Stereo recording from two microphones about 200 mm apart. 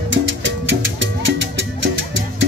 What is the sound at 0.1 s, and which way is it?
Music, 65° right (ahead or behind).